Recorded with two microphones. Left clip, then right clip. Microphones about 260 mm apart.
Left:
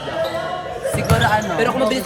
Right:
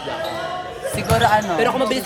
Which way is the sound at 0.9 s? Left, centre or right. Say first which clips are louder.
Right 2 dB; right.